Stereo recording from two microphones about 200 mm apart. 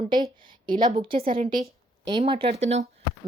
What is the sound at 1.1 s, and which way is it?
Speech, 45° right (ahead or behind).